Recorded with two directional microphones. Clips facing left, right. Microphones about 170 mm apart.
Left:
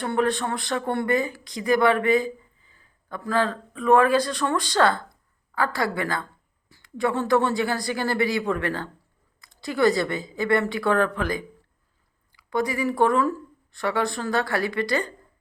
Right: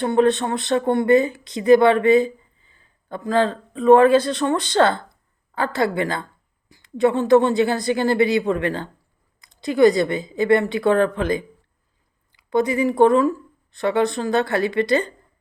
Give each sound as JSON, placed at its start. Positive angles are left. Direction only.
{"t": 0.0, "sound": "speech", "side_deg": -25}